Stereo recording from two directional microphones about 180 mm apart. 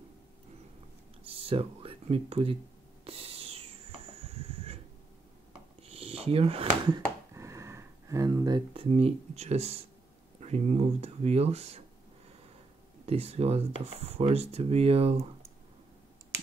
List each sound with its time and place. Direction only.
1.2 s a sound: 30° right (ahead or behind)
3.1 s owl: 35° right (ahead or behind)
4.3 s a sound: 35° right (ahead or behind)
5.9 s speech: 35° right (ahead or behind)
7.3 s speech: 15° right (ahead or behind); by 11.8 s 35° right (ahead or behind)
13.0 s speech: 35° right (ahead or behind)